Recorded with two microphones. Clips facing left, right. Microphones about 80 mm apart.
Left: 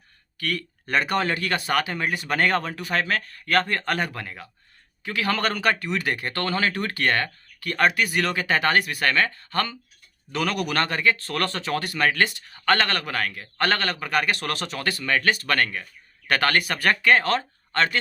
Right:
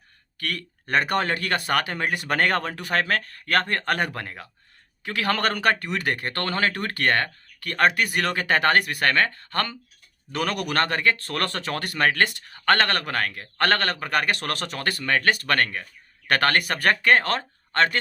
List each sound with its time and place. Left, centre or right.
0.3 s speech: right